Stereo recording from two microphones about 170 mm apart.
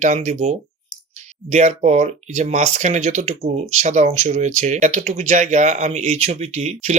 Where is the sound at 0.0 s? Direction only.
45° right (ahead or behind).